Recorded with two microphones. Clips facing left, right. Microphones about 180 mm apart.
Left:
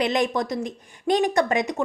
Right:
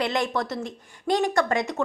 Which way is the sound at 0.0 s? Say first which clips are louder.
Left 3 dB; 20° left (ahead or behind).